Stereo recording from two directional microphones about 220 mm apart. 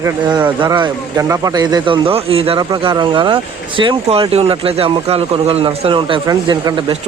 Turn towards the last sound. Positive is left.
turn(degrees=-20)  # may be behind; listen again after turning